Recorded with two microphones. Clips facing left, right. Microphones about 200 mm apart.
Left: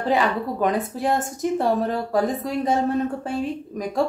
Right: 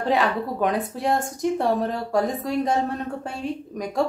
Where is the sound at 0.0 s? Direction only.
Centre (ahead or behind).